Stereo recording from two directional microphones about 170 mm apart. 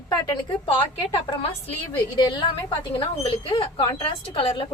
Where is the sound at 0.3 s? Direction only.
25° left (ahead or behind).